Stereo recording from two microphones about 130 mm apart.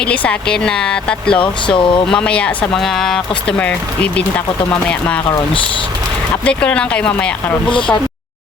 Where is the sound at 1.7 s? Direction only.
40° left (ahead or behind).